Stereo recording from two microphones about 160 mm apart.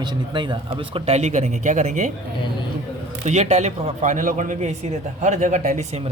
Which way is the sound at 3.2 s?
45° right (ahead or behind).